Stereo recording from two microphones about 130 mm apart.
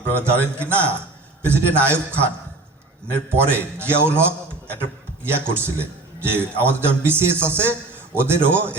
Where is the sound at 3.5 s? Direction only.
15° right (ahead or behind).